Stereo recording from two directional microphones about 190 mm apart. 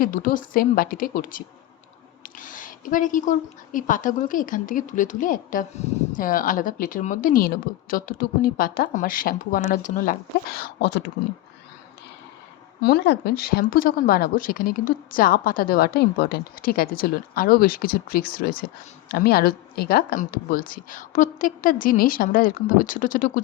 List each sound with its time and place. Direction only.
0.0 s speech: 45° left (ahead or behind); by 11.0 s 65° left (ahead or behind)
12.8 s speech: 60° left (ahead or behind)